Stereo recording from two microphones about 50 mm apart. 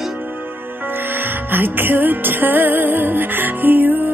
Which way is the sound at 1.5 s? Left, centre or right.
Right.